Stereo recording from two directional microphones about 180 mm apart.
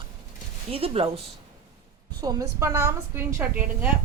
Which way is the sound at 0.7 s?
30° right (ahead or behind).